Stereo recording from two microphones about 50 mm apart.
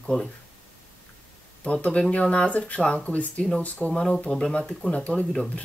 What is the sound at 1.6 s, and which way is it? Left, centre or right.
Speech, left.